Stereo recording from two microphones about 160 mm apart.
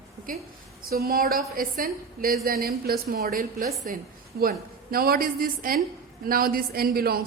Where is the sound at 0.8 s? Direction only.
70° right (ahead or behind).